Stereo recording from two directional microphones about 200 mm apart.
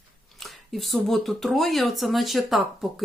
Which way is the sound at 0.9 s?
Centre (ahead or behind).